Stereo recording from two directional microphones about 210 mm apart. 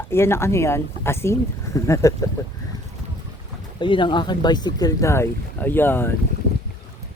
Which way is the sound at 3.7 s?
25° left (ahead or behind).